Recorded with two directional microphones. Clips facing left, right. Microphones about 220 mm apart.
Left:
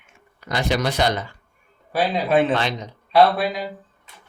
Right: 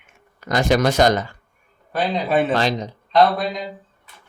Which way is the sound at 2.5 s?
40° right (ahead or behind).